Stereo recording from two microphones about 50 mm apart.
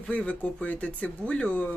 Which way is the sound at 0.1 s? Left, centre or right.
Left.